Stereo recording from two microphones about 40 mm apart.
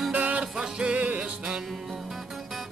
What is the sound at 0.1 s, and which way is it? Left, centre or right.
Music, right.